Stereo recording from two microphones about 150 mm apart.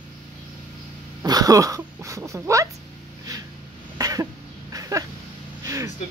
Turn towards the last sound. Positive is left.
turn(degrees=-20)  # may be behind; listen again after turning